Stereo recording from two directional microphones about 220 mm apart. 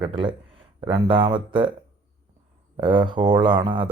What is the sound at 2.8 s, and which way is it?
Speech, 20° right (ahead or behind).